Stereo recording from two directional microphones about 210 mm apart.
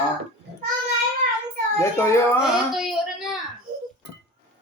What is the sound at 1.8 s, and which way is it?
Speech, 15° left (ahead or behind).